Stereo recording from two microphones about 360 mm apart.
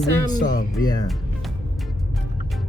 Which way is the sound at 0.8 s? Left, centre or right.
Centre.